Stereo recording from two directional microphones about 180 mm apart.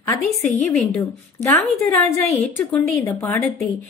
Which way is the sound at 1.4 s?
15° left (ahead or behind).